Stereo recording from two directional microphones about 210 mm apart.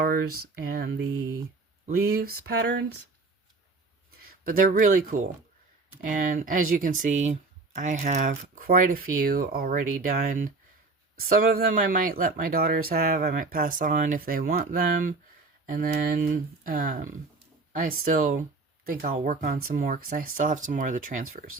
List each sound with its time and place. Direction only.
0.4 s speech: 50° right (ahead or behind)
0.9 s a sound: 70° right (ahead or behind)
1.9 s speech: 45° right (ahead or behind)
4.4 s speech: 40° right (ahead or behind)